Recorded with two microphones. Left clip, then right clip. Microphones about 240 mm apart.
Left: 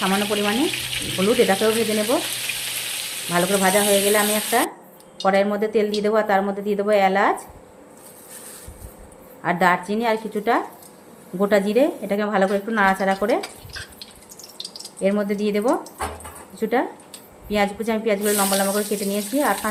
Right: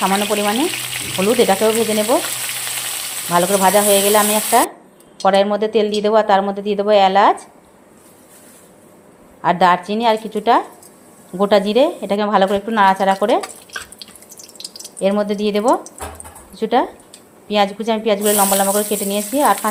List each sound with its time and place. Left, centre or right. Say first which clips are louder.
0.0 s speech: right 5 dB; centre
3.3 s speech: right 5 dB; centre
9.4 s speech: right 5 dB; centre
15.0 s speech: right 4 dB; centre